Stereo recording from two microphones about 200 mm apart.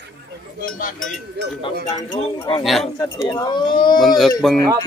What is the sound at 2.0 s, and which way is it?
Speech, 20° left (ahead or behind).